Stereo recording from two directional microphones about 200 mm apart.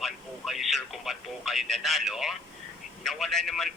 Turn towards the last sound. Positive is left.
turn(degrees=0)  # may be behind; listen again after turning